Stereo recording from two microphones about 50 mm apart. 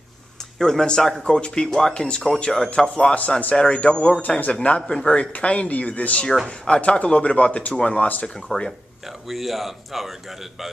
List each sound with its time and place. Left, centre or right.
0.6 s speech: centre
3.2 s speech: left
5.0 s speech: left
6.4 s speech: centre
9.3 s speech: centre